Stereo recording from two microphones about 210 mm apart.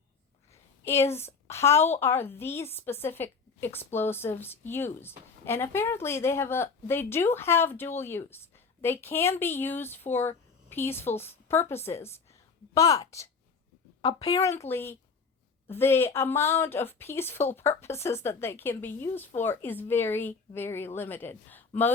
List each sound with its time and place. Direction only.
1.0 s a woman's voice: 10° left (ahead or behind)
14.0 s a woman's voice: 25° left (ahead or behind)
14.3 s a woman's voice: 15° left (ahead or behind)